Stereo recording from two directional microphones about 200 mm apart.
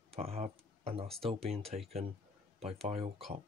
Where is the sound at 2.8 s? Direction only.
30° right (ahead or behind).